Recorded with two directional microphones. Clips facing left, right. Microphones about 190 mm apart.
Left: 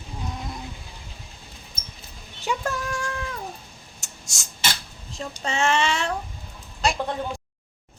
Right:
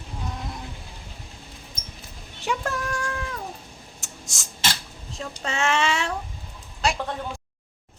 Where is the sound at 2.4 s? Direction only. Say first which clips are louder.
Even; centre (ahead or behind).